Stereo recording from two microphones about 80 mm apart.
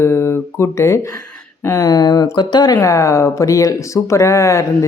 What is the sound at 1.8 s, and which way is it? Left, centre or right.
Speech, left.